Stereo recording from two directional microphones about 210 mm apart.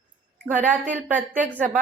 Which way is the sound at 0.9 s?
10° right (ahead or behind).